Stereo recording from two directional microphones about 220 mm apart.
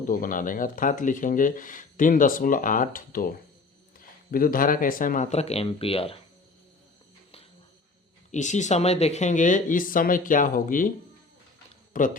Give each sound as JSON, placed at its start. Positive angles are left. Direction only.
{"t": 0.0, "sound": "speech", "side_deg": 40}
{"t": 8.3, "sound": "speech", "side_deg": 35}
{"t": 11.9, "sound": "speech", "side_deg": 40}